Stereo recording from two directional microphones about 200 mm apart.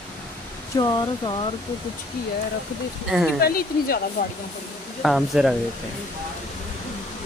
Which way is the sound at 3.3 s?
50° left (ahead or behind).